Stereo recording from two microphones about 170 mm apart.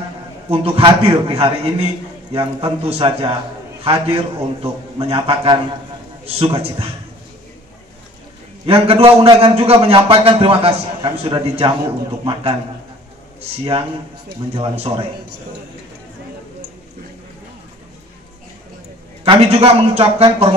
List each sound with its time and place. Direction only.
0.5 s a man's voice: 35° right (ahead or behind)
8.6 s a man's voice: 35° right (ahead or behind)
14.5 s a man's voice: 35° right (ahead or behind)
19.2 s a man's voice: 35° right (ahead or behind)